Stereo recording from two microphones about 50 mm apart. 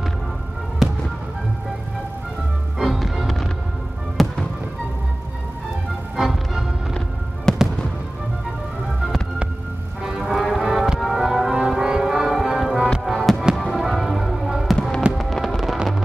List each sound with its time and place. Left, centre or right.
2.8 s music: centre
6.1 s music: centre
7.5 s fireworks: centre
10.0 s music: centre
10.3 s music: centre
13.6 s fireworks: centre
14.8 s music: centre
15.1 s music: centre